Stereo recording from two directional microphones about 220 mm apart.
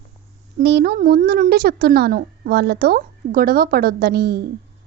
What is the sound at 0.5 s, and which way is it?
A woman's voice, 45° right (ahead or behind).